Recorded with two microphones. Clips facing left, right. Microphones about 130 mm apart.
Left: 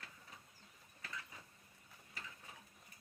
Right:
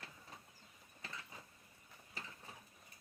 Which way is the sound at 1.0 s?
25° right (ahead or behind).